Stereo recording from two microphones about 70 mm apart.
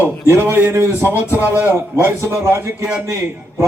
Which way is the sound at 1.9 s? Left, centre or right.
Right.